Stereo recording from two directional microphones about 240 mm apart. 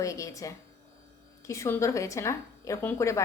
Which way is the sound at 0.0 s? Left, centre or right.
Centre.